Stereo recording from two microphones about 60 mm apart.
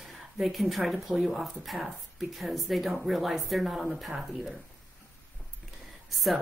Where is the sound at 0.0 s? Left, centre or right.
Centre.